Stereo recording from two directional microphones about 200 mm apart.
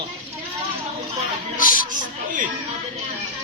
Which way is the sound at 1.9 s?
40° right (ahead or behind).